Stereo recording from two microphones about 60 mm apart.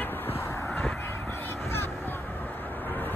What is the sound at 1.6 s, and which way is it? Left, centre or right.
Music, left.